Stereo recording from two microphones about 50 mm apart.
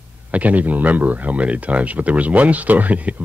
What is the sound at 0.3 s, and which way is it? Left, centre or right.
Speech, right.